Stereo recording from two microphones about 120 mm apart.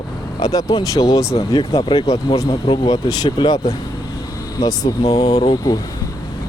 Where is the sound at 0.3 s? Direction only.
35° left (ahead or behind).